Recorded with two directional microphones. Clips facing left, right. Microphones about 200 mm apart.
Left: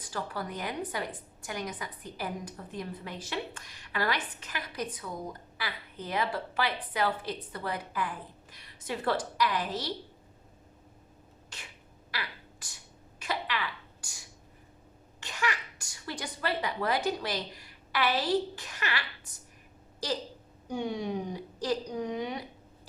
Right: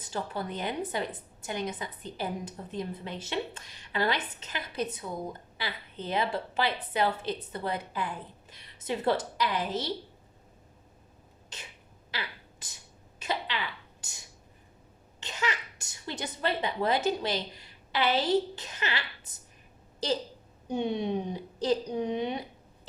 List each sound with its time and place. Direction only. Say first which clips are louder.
0.0 s a woman's voice: right 2 dB; 25° right (ahead or behind)
11.4 s a sound: right 2 dB; 20° right (ahead or behind)
12.1 s finger snapping: right 1 dB; 20° right (ahead or behind)
13.1 s throat clearing: right 1 dB; 20° right (ahead or behind)
15.2 s a sound: even; 20° right (ahead or behind)
20.0 s a woman's voice: right 3 dB; 25° right (ahead or behind)